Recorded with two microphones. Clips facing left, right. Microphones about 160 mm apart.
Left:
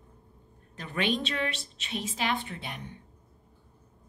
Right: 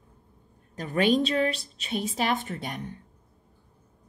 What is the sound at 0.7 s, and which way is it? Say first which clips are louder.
A woman's voice: right 7 dB; 40° right (ahead or behind).